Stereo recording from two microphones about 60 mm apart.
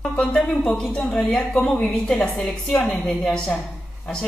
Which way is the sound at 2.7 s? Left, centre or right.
Left.